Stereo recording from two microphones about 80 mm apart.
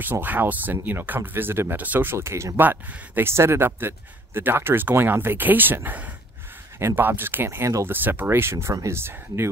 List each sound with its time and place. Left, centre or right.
0.0 s speech: right
2.1 s speech: right